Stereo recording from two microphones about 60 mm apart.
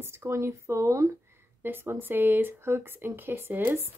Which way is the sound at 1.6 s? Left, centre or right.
Right.